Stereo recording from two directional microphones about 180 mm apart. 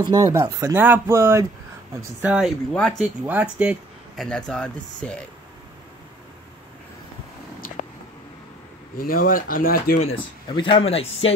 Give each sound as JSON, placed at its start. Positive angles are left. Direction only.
{"t": 0.0, "sound": "speech", "side_deg": -20}
{"t": 2.7, "sound": "speech", "side_deg": 5}
{"t": 3.3, "sound": "speech", "side_deg": -10}
{"t": 4.2, "sound": "speech", "side_deg": 5}
{"t": 8.9, "sound": "speech", "side_deg": 55}
{"t": 10.0, "sound": "speech", "side_deg": 30}